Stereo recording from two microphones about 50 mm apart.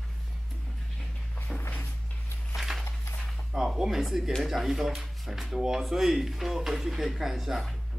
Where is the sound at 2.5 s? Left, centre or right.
Centre.